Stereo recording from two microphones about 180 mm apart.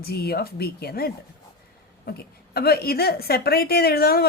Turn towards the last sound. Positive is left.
turn(degrees=60)  # may be behind; listen again after turning